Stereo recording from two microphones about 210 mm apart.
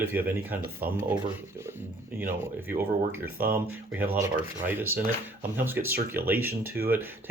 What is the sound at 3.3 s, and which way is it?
Speech, 45° right (ahead or behind).